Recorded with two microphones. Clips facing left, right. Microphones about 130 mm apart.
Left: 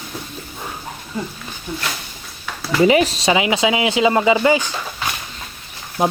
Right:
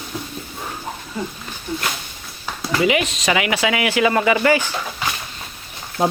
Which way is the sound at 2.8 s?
35° left (ahead or behind).